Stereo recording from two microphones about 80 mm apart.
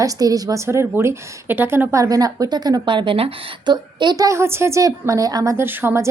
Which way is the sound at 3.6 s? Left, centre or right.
Right.